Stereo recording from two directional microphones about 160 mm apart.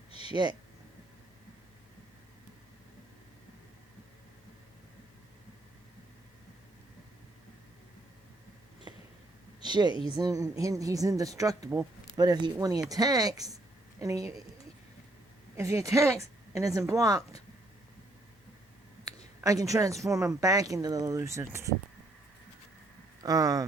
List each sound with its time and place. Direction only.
0.3 s speech: 30° right (ahead or behind)
9.6 s speech: 25° right (ahead or behind)
15.5 s speech: 20° right (ahead or behind)
19.4 s speech: 20° right (ahead or behind)
23.2 s speech: 20° right (ahead or behind)